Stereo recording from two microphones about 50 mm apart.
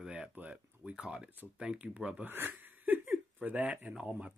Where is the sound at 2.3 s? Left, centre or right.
Right.